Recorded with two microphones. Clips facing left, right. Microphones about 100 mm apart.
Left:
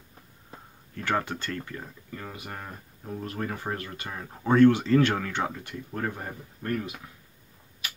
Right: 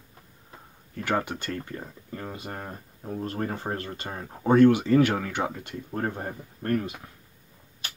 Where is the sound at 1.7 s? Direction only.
35° right (ahead or behind).